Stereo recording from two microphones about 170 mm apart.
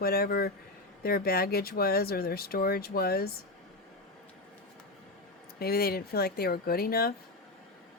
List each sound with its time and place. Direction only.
0.0 s speech: 65° left (ahead or behind)
5.5 s speech: 65° left (ahead or behind)